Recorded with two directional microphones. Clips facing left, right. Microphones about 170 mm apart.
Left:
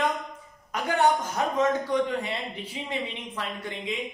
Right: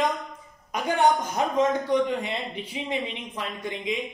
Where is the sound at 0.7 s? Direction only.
15° right (ahead or behind).